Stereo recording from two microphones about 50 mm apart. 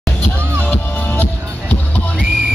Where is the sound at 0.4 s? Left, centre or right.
Right.